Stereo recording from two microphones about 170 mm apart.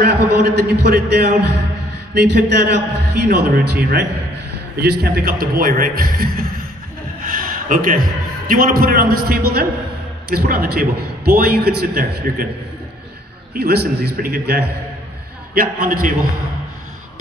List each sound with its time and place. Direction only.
0.0 s a man's voice: 75° right (ahead or behind)
3.3 s a man's voice: 60° right (ahead or behind)
13.6 s a man's voice: 70° right (ahead or behind)
15.5 s a man's voice: 55° right (ahead or behind)